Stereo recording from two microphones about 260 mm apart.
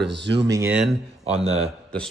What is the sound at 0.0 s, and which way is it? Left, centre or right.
Speech, right.